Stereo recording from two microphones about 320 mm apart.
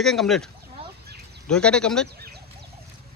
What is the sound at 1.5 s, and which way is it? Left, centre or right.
Speech, centre.